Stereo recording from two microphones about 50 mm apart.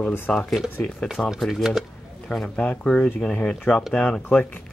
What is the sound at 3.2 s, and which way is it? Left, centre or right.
Speech, centre.